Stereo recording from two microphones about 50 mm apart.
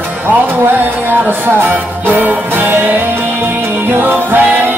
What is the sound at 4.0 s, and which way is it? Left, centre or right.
Music, right.